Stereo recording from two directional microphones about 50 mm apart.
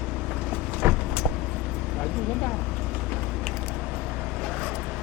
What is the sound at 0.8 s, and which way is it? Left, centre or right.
Vehicle, right.